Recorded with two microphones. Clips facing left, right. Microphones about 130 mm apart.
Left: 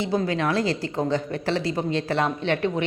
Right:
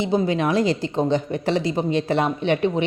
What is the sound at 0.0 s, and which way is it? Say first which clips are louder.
A woman's voice: right 3 dB; 20° right (ahead or behind).